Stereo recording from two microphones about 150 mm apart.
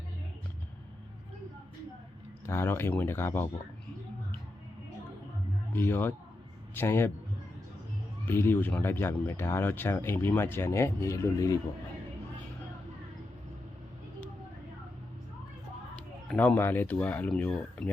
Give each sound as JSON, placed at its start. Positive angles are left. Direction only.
{"t": 2.5, "sound": "speech", "side_deg": 15}
{"t": 5.7, "sound": "speech", "side_deg": 15}
{"t": 8.2, "sound": "speech", "side_deg": 15}
{"t": 16.3, "sound": "speech", "side_deg": 10}